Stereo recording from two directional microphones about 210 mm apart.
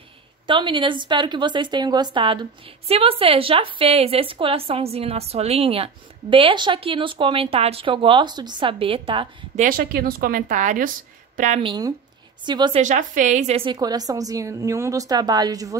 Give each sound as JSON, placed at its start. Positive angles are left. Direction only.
{"t": 0.5, "sound": "speech", "side_deg": -25}
{"t": 9.6, "sound": "a woman's voice", "side_deg": -45}
{"t": 11.6, "sound": "speech", "side_deg": -20}
{"t": 12.8, "sound": "a woman's voice", "side_deg": -35}